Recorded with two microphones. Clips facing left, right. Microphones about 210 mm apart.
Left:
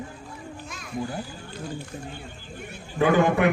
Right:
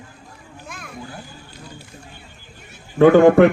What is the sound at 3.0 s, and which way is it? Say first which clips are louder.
Speech: right 10 dB; 55° right (ahead or behind).